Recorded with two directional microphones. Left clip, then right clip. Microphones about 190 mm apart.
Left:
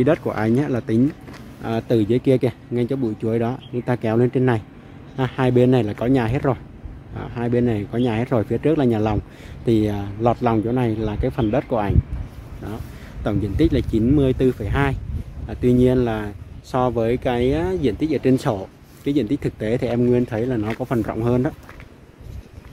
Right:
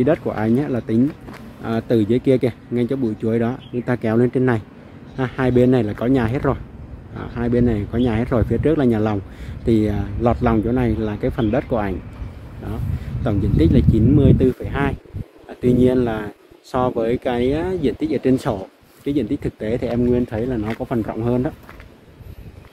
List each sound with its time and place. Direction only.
0.0 s speech: 20° left (ahead or behind)
13.2 s speech: 15° left (ahead or behind)